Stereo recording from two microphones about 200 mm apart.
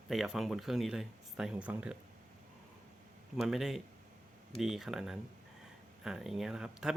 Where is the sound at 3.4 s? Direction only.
Centre (ahead or behind).